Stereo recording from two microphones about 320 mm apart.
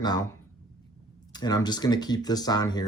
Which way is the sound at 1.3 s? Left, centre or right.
Centre.